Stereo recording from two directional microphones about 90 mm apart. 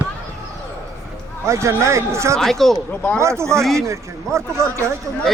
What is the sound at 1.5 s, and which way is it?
Speech, 35° right (ahead or behind).